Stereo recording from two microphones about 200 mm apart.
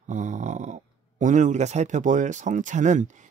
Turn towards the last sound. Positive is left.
turn(degrees=-35)  # may be behind; listen again after turning